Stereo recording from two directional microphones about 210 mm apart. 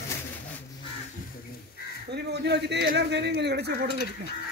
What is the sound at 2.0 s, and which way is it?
Speech, 55° right (ahead or behind).